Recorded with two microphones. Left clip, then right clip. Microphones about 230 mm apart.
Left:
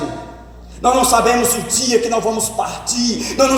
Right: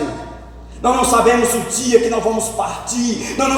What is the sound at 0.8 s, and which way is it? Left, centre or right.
A man's voice, left.